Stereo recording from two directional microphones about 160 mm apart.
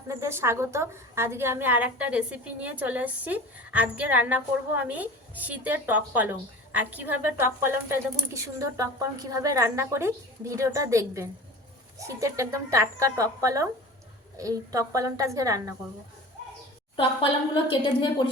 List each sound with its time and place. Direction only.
0.1 s a woman's voice: 15° right (ahead or behind)
17.0 s a woman's voice: 35° left (ahead or behind)